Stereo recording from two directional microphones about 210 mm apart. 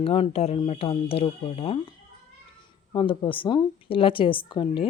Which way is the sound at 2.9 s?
25° left (ahead or behind).